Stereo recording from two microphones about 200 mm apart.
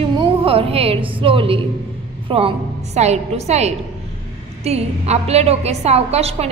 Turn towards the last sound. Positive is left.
turn(degrees=-30)  # may be behind; listen again after turning